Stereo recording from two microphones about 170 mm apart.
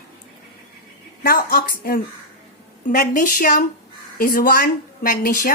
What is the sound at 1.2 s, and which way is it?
A woman's voice, 60° left (ahead or behind).